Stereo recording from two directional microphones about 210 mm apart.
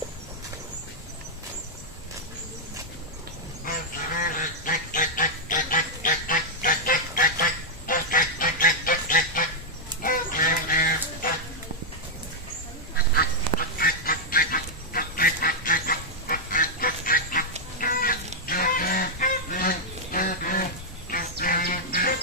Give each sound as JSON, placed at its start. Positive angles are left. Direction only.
{"t": 4.2, "sound": "duck", "side_deg": 40}
{"t": 10.0, "sound": "goose", "side_deg": 40}
{"t": 13.1, "sound": "goose", "side_deg": 45}
{"t": 17.7, "sound": "cat", "side_deg": 40}
{"t": 18.4, "sound": "goose", "side_deg": 40}
{"t": 21.1, "sound": "a sound", "side_deg": 40}